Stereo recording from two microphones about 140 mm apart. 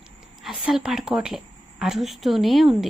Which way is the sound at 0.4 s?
5° right (ahead or behind).